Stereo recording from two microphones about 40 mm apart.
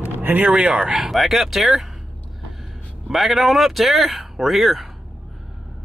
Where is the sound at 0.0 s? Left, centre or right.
Right.